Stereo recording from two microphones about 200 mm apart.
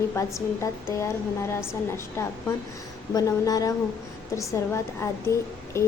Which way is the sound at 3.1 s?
20° left (ahead or behind).